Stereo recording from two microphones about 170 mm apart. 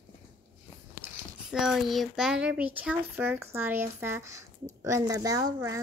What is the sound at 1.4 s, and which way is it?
A child's voice, 5° right (ahead or behind).